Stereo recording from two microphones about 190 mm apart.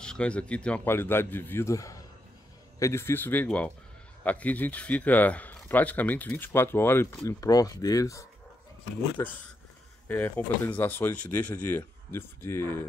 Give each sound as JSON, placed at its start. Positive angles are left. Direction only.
{"t": 0.0, "sound": "a man's voice", "side_deg": 5}